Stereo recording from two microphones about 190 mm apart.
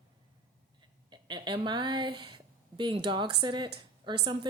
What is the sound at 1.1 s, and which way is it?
A woman's voice, 25° right (ahead or behind).